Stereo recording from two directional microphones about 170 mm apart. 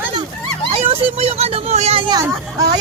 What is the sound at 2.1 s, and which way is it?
Speech, 20° right (ahead or behind).